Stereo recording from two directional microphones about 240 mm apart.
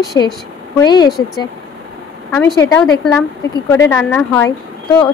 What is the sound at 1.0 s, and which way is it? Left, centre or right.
Speech, centre.